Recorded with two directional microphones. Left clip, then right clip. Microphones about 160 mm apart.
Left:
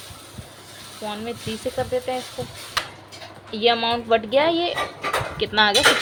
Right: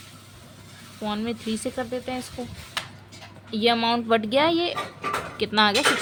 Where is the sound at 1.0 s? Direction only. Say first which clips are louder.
Even; 35° right (ahead or behind).